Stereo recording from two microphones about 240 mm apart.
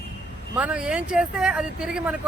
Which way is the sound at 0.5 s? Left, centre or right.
Centre.